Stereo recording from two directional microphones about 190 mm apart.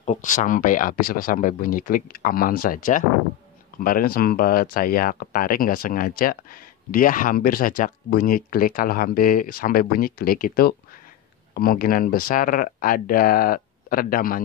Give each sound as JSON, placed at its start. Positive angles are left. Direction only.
{"t": 0.0, "sound": "speech", "side_deg": 40}